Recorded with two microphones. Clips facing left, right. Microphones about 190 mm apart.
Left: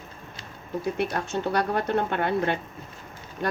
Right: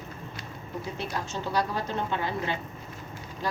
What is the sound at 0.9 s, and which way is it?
Speech, 60° left (ahead or behind).